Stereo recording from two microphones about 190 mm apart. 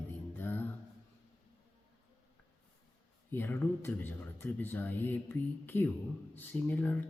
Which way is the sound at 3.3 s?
10° left (ahead or behind).